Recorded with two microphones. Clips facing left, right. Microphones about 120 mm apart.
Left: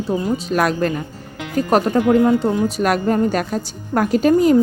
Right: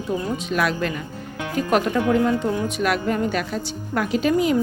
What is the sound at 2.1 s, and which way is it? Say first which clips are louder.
A woman's voice: left 5 dB; 25° left (ahead or behind).